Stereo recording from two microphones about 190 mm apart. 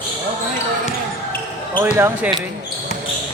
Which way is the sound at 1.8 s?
10° right (ahead or behind).